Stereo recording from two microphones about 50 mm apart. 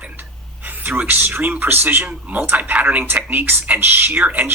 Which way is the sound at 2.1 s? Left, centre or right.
Right.